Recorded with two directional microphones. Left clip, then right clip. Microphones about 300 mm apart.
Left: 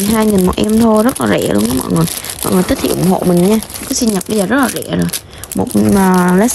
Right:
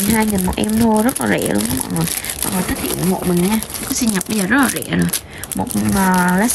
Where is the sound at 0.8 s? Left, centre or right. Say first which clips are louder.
Left 4 dB; right.